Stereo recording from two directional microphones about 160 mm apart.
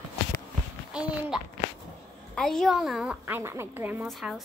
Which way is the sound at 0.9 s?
5° right (ahead or behind).